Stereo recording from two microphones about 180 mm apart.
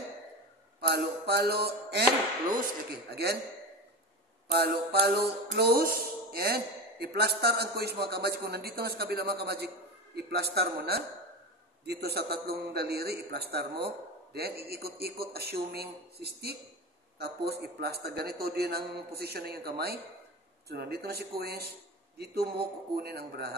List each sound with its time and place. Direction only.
0.7 s a sound: 65° right (ahead or behind)
3.1 s music: 65° right (ahead or behind)
4.5 s music: 65° right (ahead or behind)